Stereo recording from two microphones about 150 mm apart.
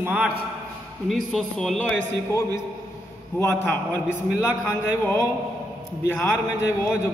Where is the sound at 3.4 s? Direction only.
15° left (ahead or behind).